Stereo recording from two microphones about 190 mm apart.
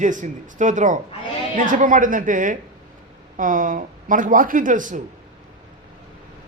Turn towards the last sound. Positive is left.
turn(degrees=-45)  # may be behind; listen again after turning